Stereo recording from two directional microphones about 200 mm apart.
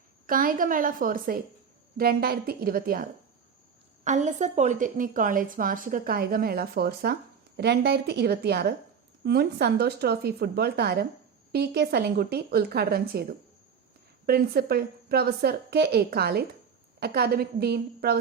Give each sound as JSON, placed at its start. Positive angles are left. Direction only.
{"t": 0.3, "sound": "a woman's voice", "side_deg": -45}
{"t": 4.0, "sound": "a woman's voice", "side_deg": -35}